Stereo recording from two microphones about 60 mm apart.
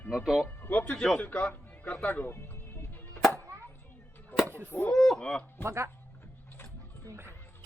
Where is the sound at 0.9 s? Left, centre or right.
Centre.